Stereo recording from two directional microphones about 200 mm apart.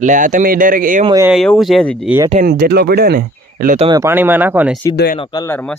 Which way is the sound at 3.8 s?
20° right (ahead or behind).